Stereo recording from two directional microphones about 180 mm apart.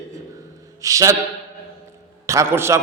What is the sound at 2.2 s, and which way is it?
Speech, 15° right (ahead or behind).